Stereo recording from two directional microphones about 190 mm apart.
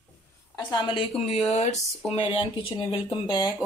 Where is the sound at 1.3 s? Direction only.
30° left (ahead or behind).